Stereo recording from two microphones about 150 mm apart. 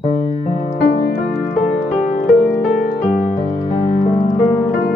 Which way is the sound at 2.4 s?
15° left (ahead or behind).